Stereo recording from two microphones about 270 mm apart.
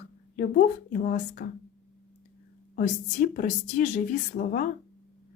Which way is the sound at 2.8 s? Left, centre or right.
Left.